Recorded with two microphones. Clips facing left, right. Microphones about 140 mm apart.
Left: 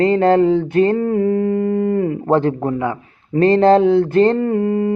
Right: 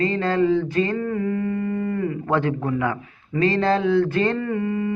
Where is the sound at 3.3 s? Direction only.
50° left (ahead or behind).